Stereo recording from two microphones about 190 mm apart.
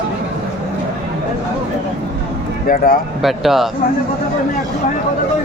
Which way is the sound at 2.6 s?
50° left (ahead or behind).